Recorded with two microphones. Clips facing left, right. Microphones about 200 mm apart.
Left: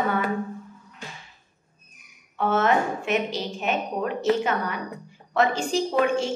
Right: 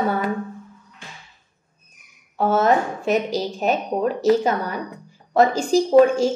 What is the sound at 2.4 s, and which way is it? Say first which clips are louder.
A woman's voice: right 4 dB; 40° right (ahead or behind).